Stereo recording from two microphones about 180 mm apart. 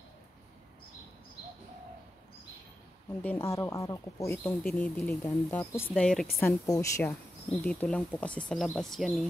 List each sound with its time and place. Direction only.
3.2 s speech: 15° left (ahead or behind)
4.4 s speech: 5° left (ahead or behind)
6.4 s speech: 15° left (ahead or behind); by 9.1 s centre (ahead or behind)